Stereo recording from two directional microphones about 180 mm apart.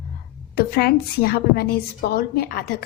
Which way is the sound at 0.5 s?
60° left (ahead or behind).